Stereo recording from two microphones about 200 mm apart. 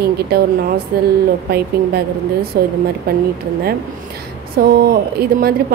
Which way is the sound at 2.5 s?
50° right (ahead or behind).